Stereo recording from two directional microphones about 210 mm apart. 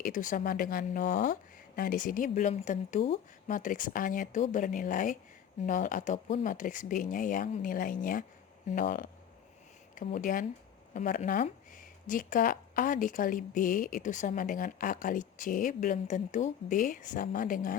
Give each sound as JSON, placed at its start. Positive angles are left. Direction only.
{"t": 0.0, "sound": "speech", "side_deg": 40}